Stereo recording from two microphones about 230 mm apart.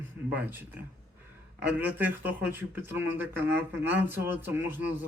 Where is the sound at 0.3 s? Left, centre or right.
Centre.